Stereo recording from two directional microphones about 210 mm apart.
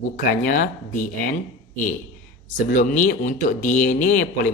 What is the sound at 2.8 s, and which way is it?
Speech, 40° left (ahead or behind).